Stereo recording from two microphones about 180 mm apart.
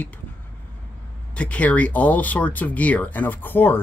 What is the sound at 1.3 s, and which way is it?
Speech, 5° left (ahead or behind).